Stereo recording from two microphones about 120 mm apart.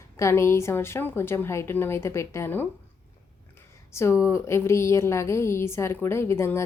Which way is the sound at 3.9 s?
25° left (ahead or behind).